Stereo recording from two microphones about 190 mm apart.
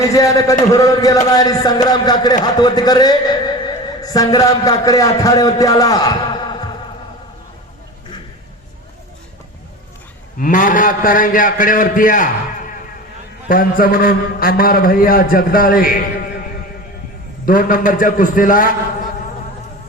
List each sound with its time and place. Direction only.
0.1 s a man's voice: 15° left (ahead or behind)
10.3 s a man's voice: 45° left (ahead or behind)
17.4 s a man's voice: 45° left (ahead or behind)